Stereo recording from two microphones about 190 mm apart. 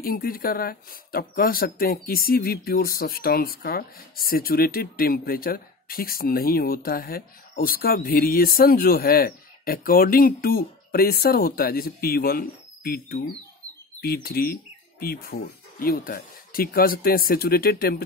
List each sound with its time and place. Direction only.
0.0 s speech: 50° left (ahead or behind)